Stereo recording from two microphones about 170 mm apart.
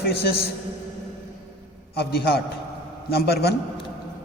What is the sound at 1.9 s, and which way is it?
Speech, 70° left (ahead or behind).